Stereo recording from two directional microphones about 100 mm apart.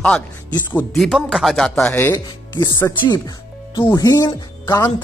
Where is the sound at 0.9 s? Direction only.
Centre (ahead or behind).